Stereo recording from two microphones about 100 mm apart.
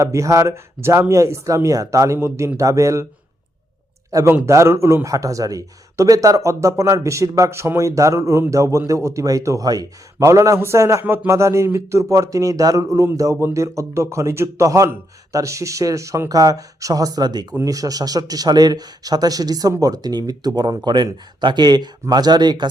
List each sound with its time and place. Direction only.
0.0 s speech: 30° right (ahead or behind)
4.1 s speech: 40° right (ahead or behind)
11.0 s speech: 15° right (ahead or behind)
11.3 s speech: 30° right (ahead or behind); by 22.7 s 45° right (ahead or behind)